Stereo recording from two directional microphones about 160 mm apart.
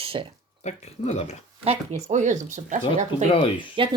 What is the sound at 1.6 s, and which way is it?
Speech, 45° right (ahead or behind).